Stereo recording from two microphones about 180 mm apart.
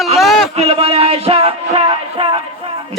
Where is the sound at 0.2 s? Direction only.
Centre (ahead or behind).